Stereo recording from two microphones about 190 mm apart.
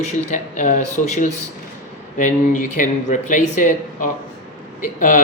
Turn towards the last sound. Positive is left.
turn(degrees=40)  # may be behind; listen again after turning